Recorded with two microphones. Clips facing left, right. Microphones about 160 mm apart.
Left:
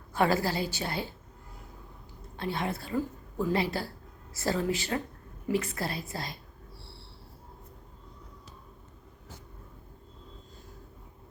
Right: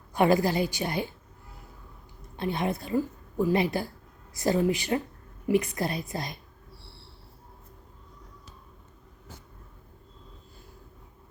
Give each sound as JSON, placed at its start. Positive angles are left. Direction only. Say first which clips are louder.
{"t": 0.1, "sound": "a woman's voice", "louder": "right 4 dB", "side_deg": -15}
{"t": 2.3, "sound": "a woman's voice", "louder": "right 4 dB", "side_deg": -20}